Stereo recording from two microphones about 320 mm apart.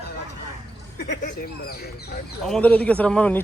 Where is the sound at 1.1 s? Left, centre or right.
Left.